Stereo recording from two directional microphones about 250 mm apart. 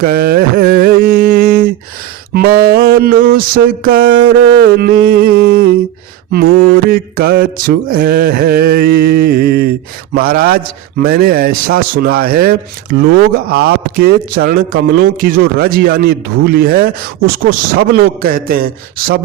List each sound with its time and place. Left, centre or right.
0.0 s a sound: right
2.3 s speech: right
6.9 s speech: right